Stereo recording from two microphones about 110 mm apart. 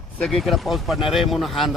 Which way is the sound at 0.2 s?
5° left (ahead or behind).